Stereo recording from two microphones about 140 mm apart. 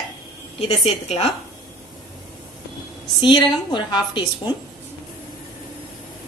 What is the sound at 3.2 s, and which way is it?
A woman's voice, 35° left (ahead or behind).